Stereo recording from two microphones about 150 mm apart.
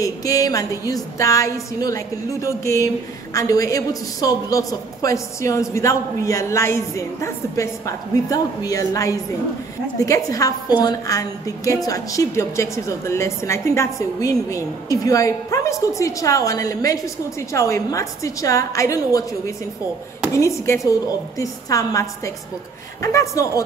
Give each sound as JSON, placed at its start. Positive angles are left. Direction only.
{"t": 0.0, "sound": "a woman's voice", "side_deg": 25}